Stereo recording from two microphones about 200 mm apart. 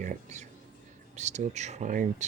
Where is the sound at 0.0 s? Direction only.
40° right (ahead or behind).